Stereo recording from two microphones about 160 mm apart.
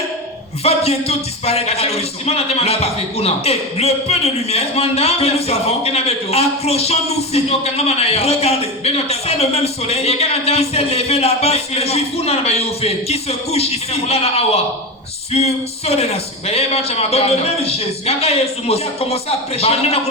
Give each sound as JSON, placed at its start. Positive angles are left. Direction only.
{"t": 0.6, "sound": "a man's voice", "side_deg": 40}